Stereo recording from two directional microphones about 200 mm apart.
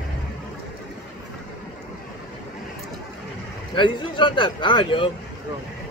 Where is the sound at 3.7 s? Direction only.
25° left (ahead or behind).